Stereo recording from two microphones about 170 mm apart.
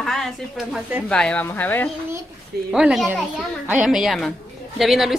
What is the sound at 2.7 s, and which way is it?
A woman's voice, 5° right (ahead or behind).